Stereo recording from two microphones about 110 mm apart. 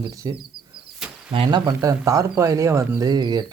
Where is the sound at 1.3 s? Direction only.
50° right (ahead or behind).